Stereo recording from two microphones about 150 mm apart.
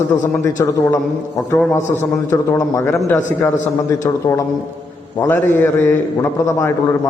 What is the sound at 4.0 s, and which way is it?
A man's voice, 20° left (ahead or behind).